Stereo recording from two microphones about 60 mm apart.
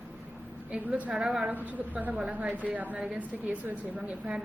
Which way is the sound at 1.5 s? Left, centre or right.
Right.